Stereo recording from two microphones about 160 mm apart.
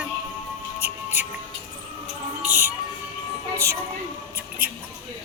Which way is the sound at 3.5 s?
15° right (ahead or behind).